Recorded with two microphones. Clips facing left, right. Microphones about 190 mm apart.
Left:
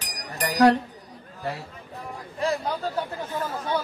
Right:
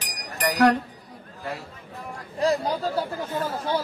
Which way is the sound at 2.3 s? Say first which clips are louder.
Right 3 dB; 35° right (ahead or behind).